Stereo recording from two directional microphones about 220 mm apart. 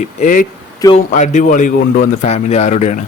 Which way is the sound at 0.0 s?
35° left (ahead or behind).